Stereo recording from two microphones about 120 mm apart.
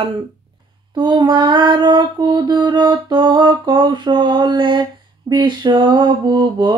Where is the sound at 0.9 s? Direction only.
40° right (ahead or behind).